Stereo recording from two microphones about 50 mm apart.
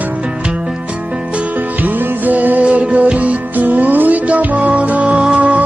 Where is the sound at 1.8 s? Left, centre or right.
Right.